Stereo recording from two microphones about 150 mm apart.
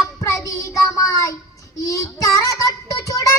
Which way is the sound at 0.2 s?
20° left (ahead or behind).